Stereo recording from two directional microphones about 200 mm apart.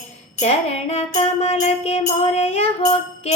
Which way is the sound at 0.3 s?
30° left (ahead or behind).